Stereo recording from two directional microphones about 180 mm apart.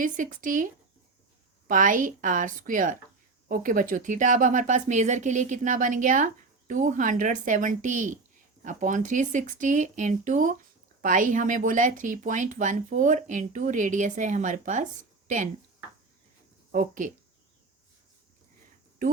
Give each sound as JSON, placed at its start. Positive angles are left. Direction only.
{"t": 0.0, "sound": "a woman's voice", "side_deg": -50}
{"t": 16.7, "sound": "a woman's voice", "side_deg": -45}